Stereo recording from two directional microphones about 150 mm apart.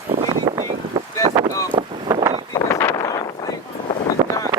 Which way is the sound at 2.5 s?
20° left (ahead or behind).